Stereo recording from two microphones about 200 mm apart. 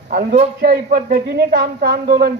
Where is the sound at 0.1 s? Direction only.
45° right (ahead or behind).